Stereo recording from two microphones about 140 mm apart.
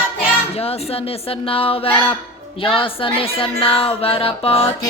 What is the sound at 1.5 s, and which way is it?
Music, 40° left (ahead or behind).